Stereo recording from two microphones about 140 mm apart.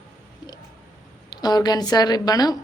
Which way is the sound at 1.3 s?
30° left (ahead or behind).